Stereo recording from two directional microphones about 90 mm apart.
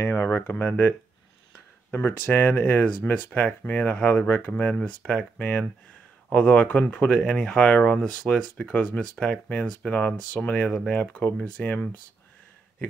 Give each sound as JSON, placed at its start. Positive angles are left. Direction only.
{"t": 0.0, "sound": "speech", "side_deg": 25}